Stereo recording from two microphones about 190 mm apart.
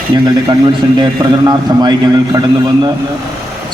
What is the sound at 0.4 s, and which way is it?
A man's voice, 25° right (ahead or behind).